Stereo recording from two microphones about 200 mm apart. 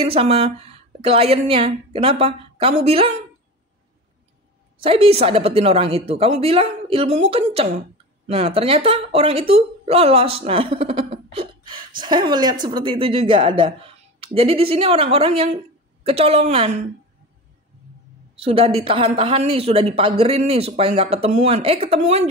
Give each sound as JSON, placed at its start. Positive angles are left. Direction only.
{"t": 0.0, "sound": "a woman's voice", "side_deg": -30}
{"t": 4.7, "sound": "a woman's voice", "side_deg": -30}
{"t": 18.3, "sound": "a woman's voice", "side_deg": -25}